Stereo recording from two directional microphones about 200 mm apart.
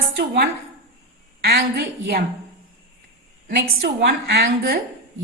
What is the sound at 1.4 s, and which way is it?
Speech, 50° right (ahead or behind).